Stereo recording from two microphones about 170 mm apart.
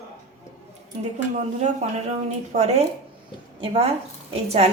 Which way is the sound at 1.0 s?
45° right (ahead or behind).